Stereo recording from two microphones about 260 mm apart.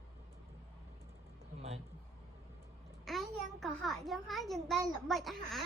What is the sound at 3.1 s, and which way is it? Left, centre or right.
A child's voice, centre.